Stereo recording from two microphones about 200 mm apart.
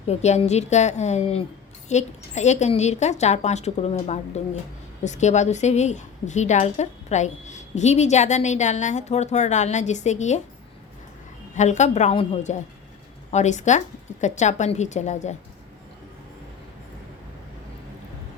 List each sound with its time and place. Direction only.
0.1 s a woman's voice: 35° left (ahead or behind)
11.5 s a woman's voice: 35° left (ahead or behind)